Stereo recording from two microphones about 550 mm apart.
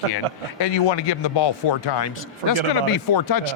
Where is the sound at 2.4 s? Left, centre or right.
Right.